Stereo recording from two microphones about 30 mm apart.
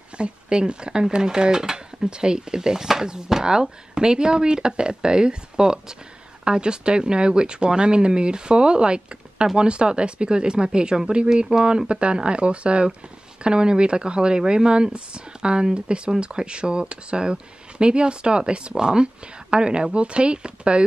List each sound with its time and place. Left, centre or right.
0.2 s speech: right